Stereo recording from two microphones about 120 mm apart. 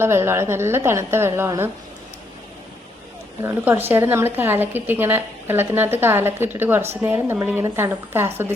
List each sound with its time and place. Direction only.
0.0 s a woman's voice: 20° right (ahead or behind)
3.4 s a woman's voice: 15° right (ahead or behind)